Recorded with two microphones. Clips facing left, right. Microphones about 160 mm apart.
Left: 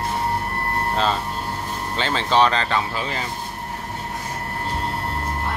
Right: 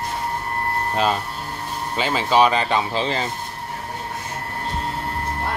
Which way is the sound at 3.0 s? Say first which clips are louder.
Right 4 dB; 25° right (ahead or behind).